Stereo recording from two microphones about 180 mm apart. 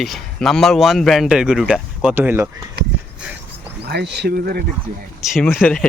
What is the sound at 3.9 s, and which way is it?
Speech, 65° right (ahead or behind).